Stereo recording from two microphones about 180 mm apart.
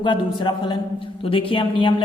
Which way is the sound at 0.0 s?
25° left (ahead or behind).